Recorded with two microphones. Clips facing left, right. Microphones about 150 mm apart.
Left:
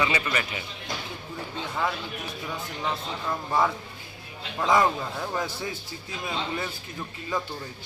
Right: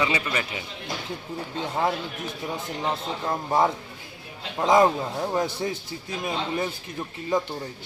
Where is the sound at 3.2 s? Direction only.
30° right (ahead or behind).